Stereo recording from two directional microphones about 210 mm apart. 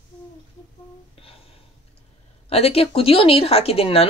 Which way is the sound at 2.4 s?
30° left (ahead or behind).